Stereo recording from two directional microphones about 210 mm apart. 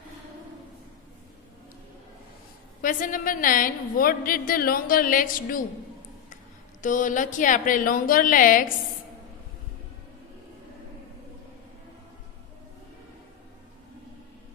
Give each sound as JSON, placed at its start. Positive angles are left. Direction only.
{"t": 2.8, "sound": "a woman's voice", "side_deg": 40}
{"t": 6.8, "sound": "a woman's voice", "side_deg": 40}